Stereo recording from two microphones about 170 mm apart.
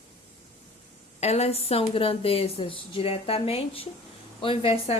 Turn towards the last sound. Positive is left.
turn(degrees=30)  # may be behind; listen again after turning